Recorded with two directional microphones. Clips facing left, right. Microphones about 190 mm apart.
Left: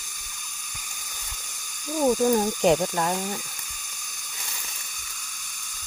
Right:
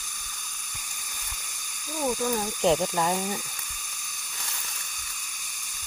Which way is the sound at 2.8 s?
Centre (ahead or behind).